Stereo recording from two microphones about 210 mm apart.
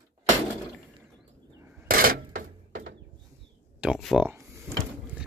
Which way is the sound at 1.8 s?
45° right (ahead or behind).